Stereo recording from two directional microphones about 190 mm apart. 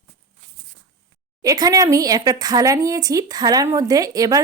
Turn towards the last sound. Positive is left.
turn(degrees=-20)  # may be behind; listen again after turning